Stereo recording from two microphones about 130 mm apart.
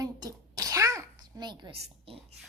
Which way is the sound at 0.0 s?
30° right (ahead or behind).